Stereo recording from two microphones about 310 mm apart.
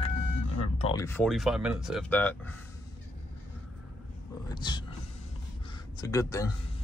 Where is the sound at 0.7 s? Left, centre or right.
Centre.